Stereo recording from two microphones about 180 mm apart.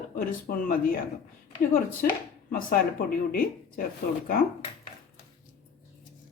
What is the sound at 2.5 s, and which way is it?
Speech, 50° left (ahead or behind).